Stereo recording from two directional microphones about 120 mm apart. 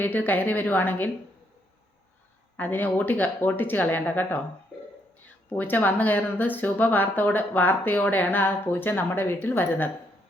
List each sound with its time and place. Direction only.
0.0 s speech: 15° left (ahead or behind)
2.6 s speech: 15° left (ahead or behind)
5.5 s speech: 15° left (ahead or behind)